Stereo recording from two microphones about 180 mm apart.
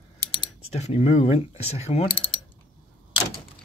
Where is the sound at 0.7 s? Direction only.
35° left (ahead or behind).